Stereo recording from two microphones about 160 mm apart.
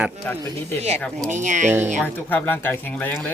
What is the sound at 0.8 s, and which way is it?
Speech, 45° right (ahead or behind).